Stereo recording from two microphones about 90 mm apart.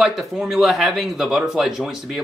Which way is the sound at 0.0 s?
5° right (ahead or behind).